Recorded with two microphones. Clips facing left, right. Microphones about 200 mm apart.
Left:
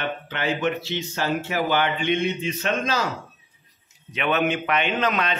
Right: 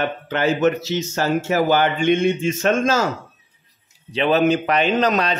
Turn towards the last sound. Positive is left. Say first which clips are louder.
# right 5 dB
turn(degrees=-35)  # may be behind; listen again after turning